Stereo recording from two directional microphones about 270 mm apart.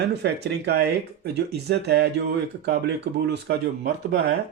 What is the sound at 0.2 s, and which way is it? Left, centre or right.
Speech, right.